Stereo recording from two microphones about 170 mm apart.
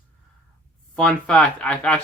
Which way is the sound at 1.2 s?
5° left (ahead or behind).